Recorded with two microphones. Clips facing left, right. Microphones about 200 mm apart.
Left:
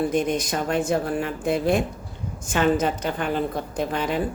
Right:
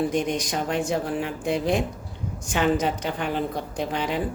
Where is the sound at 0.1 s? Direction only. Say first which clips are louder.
Left 2 dB; 15° right (ahead or behind).